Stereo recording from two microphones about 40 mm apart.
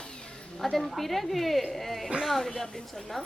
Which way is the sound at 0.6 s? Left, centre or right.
Centre.